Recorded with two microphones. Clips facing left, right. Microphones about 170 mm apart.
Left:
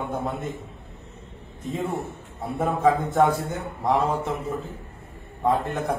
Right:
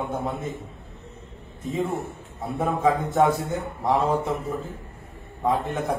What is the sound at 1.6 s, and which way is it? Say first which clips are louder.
A man's voice: right 1 dB; centre (ahead or behind).